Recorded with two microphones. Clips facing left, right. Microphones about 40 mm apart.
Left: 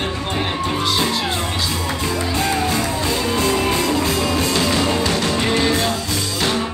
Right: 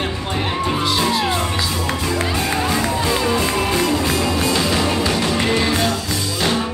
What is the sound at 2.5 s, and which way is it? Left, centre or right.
Music, right.